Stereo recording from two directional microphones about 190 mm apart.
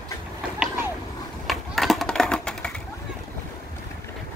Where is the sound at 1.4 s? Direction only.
Centre (ahead or behind).